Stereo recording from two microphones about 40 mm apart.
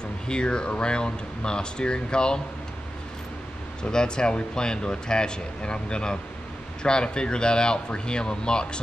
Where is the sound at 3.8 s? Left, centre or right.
Left.